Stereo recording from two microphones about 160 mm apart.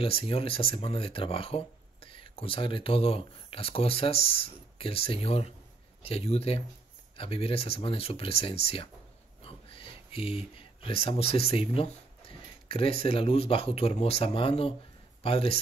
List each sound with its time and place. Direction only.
0.0 s speech: 35° left (ahead or behind)